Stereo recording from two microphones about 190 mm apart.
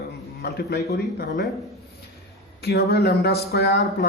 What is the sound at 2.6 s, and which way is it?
Speech, 60° left (ahead or behind).